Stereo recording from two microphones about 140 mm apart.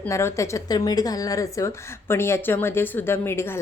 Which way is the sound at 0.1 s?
20° left (ahead or behind).